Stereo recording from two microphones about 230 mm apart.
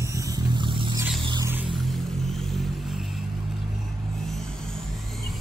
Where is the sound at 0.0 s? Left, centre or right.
Centre.